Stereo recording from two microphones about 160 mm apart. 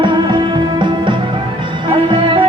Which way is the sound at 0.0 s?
30° right (ahead or behind).